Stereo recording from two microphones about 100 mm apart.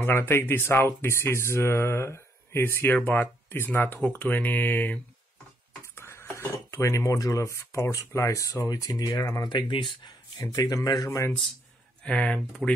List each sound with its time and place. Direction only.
0.0 s speech: 20° left (ahead or behind)
5.9 s a sound: 25° left (ahead or behind)
6.5 s speech: 30° left (ahead or behind)
12.0 s speech: 10° left (ahead or behind)
12.6 s speech: centre (ahead or behind)